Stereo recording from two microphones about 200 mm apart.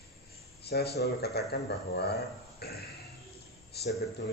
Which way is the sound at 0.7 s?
55° left (ahead or behind).